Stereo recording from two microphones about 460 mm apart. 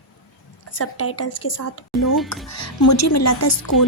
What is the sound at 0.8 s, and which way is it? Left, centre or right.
A woman's voice, left.